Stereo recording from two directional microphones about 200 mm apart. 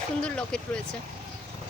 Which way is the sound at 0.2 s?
5° left (ahead or behind).